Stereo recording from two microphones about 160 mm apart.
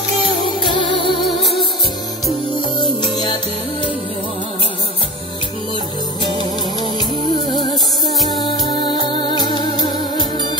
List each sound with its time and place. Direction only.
0.6 s music: 30° left (ahead or behind)
3.0 s music: 30° left (ahead or behind)
8.3 s music: 25° left (ahead or behind)